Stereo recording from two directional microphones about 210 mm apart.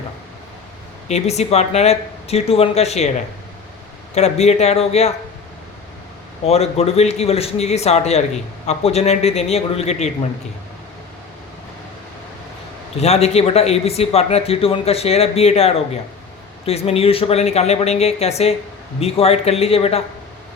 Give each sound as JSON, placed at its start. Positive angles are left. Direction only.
{"t": 1.0, "sound": "speech", "side_deg": 30}
{"t": 4.1, "sound": "speech", "side_deg": 30}
{"t": 6.4, "sound": "speech", "side_deg": 30}
{"t": 13.0, "sound": "speech", "side_deg": 30}